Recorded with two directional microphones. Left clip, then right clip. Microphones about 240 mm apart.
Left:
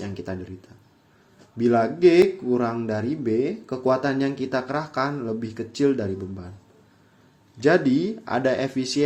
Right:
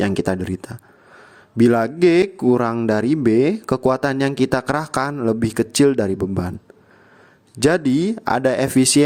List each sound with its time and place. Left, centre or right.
0.0 s speech: right
7.6 s speech: right